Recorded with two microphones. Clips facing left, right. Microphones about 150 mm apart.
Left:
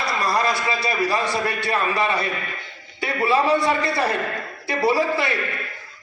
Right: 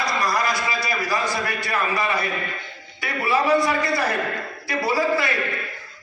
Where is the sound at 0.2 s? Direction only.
30° left (ahead or behind).